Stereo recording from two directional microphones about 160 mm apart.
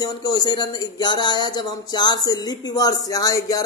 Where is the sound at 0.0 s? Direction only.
25° left (ahead or behind).